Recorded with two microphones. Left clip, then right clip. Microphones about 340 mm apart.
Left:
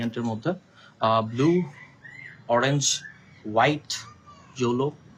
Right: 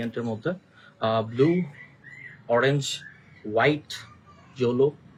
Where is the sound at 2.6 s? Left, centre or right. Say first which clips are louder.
Even; centre.